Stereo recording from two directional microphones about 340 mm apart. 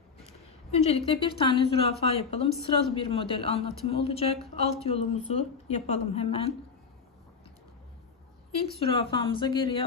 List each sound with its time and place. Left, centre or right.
0.7 s a woman's voice: centre
8.8 s a woman's voice: centre